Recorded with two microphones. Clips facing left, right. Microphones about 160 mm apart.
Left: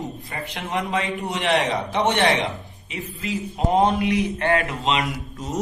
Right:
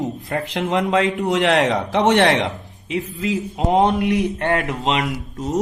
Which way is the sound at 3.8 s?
60° right (ahead or behind).